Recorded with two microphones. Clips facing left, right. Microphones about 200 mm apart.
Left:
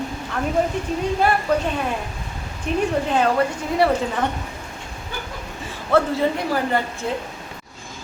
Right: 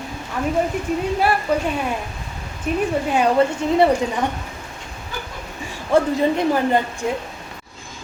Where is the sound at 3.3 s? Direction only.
20° right (ahead or behind).